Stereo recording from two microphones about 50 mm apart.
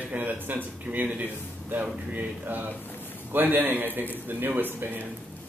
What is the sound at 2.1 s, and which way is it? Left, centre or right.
A man's voice, right.